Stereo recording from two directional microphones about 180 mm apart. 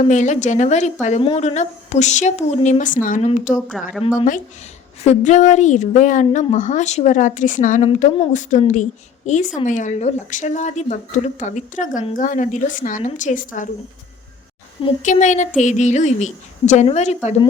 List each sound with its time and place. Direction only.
0.0 s a woman's voice: 40° left (ahead or behind)
3.7 s a woman's voice: centre (ahead or behind)
5.0 s a woman's voice: 40° left (ahead or behind)
15.0 s a woman's voice: 45° left (ahead or behind)